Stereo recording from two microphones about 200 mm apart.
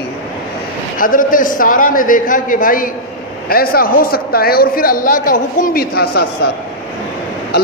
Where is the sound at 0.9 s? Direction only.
45° left (ahead or behind).